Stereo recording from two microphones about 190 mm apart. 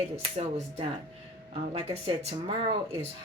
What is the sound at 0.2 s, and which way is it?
Speech, 30° right (ahead or behind).